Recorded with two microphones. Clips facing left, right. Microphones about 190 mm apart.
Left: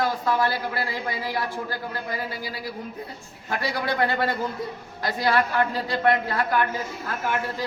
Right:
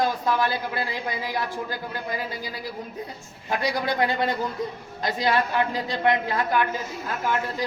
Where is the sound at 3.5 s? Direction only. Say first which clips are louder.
Right 1 dB; 20° right (ahead or behind).